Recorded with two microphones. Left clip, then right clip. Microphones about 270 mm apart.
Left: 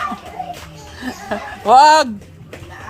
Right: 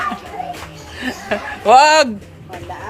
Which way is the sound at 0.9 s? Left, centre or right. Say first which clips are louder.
Right 3 dB; left.